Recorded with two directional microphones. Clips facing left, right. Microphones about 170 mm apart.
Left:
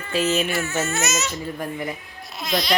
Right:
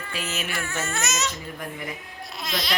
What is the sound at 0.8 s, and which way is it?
Speech, centre (ahead or behind).